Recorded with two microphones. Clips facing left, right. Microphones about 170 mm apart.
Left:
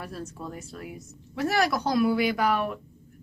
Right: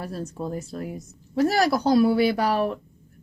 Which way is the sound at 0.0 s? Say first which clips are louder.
Right 5 dB; 35° right (ahead or behind).